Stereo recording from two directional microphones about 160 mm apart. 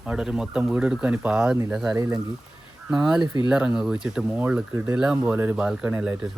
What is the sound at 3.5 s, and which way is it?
Speech, 5° right (ahead or behind).